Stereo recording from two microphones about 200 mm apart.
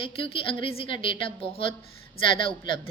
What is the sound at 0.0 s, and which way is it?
A woman's voice, 25° left (ahead or behind).